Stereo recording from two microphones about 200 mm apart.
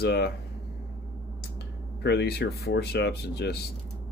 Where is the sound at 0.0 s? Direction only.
55° left (ahead or behind).